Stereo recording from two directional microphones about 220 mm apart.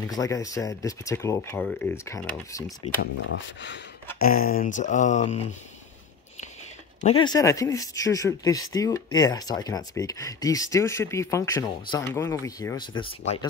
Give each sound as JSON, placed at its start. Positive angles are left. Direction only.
{"t": 0.0, "sound": "speech", "side_deg": 15}
{"t": 3.0, "sound": "speech", "side_deg": 55}
{"t": 4.2, "sound": "music", "side_deg": 40}
{"t": 7.0, "sound": "speech", "side_deg": 25}